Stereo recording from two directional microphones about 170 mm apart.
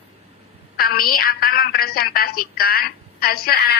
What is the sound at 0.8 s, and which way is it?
A woman's voice, 60° left (ahead or behind).